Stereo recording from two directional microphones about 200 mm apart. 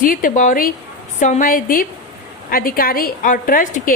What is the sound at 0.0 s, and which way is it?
A woman's voice, 45° left (ahead or behind).